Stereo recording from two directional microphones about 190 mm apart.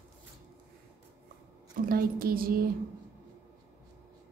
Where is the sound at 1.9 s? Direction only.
50° right (ahead or behind).